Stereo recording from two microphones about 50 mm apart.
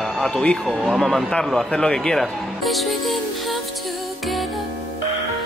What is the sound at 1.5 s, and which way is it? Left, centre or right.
Speech, centre.